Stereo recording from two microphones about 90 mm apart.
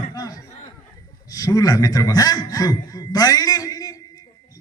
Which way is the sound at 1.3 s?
40° left (ahead or behind).